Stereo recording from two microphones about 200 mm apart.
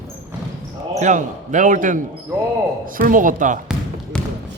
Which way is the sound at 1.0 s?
40° right (ahead or behind).